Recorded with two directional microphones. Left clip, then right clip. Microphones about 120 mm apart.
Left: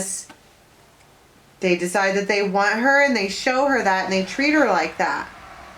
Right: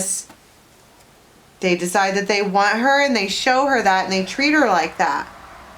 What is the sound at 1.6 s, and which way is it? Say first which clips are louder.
A woman's voice: right 2 dB; 25° right (ahead or behind).